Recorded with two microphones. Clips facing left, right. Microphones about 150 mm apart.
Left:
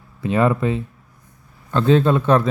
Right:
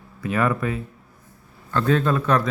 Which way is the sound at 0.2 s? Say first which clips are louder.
Left 4 dB; 25° left (ahead or behind).